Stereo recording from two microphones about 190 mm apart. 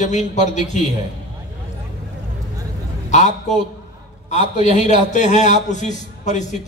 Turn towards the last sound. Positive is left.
turn(degrees=40)  # may be behind; listen again after turning